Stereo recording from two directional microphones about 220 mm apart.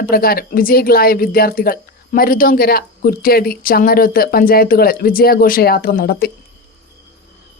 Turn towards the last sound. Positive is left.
turn(degrees=45)  # may be behind; listen again after turning